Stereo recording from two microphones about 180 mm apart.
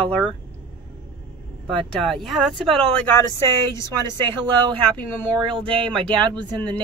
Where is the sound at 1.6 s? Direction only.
5° left (ahead or behind).